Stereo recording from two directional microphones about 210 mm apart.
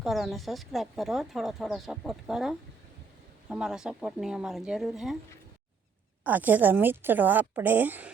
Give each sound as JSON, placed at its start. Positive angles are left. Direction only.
{"t": 0.0, "sound": "speech", "side_deg": 0}
{"t": 6.2, "sound": "a woman's voice", "side_deg": -10}